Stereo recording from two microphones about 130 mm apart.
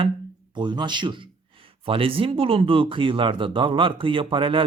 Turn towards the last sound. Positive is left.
turn(degrees=-40)  # may be behind; listen again after turning